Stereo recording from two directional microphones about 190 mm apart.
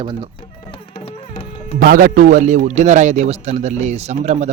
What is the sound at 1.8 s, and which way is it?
A man's voice, 50° right (ahead or behind).